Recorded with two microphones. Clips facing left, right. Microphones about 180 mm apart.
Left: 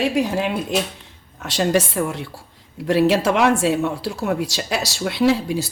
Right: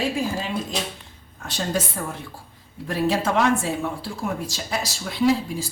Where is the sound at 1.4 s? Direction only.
80° left.